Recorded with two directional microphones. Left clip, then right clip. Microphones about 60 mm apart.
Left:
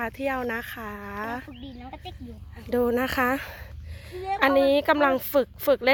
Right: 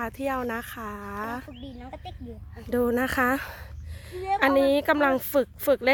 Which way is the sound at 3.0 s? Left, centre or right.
Right.